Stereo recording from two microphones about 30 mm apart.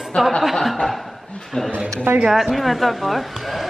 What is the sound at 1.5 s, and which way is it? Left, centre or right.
Speech, left.